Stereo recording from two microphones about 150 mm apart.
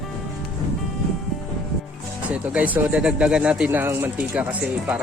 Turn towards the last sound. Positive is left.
turn(degrees=-10)  # may be behind; listen again after turning